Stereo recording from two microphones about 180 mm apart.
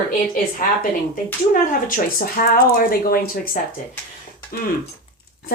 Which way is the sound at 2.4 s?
55° left (ahead or behind).